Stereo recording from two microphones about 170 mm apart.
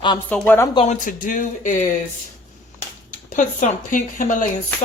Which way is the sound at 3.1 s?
50° left (ahead or behind).